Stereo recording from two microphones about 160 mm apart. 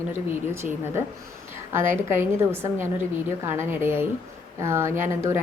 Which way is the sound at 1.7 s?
15° right (ahead or behind).